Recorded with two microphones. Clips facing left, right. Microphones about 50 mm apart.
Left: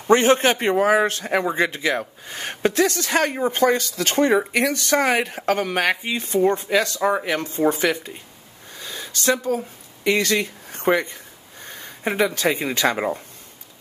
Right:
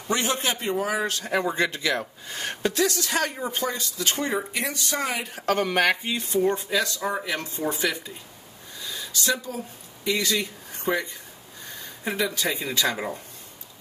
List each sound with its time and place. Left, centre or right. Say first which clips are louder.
0.1 s speech: left 10 dB; left
1.0 s speech: left 4 dB; left
1.4 s speech: left 3 dB; centre; by 5.3 s left
5.6 s speech: right 2 dB; centre
6.1 s speech: left 4 dB; left
8.7 s a sound: left 1 dB; left
10.0 s speech: left 5 dB; left